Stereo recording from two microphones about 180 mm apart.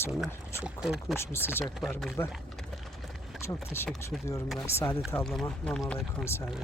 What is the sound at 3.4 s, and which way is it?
Speech, 15° left (ahead or behind).